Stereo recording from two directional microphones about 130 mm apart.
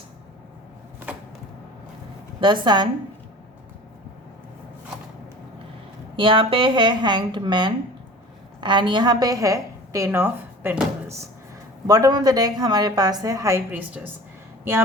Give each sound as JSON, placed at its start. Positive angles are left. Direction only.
{"t": 2.4, "sound": "a woman's voice", "side_deg": -35}
{"t": 6.1, "sound": "a woman's voice", "side_deg": -40}
{"t": 11.9, "sound": "a woman's voice", "side_deg": -30}
{"t": 13.7, "sound": "a woman's voice", "side_deg": -15}